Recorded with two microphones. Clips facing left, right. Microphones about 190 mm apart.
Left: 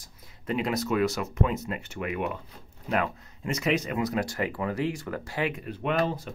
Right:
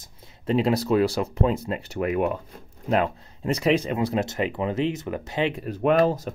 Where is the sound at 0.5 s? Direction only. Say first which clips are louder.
Right 6 dB; 30° right (ahead or behind).